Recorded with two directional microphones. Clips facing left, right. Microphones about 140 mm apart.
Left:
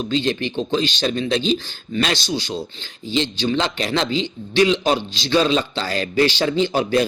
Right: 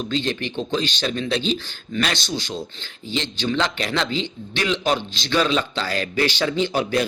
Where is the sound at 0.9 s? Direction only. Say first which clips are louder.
Left 3 dB; 40° left (ahead or behind).